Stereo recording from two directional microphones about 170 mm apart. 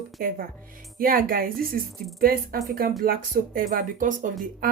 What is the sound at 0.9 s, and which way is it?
A woman's voice, 55° right (ahead or behind).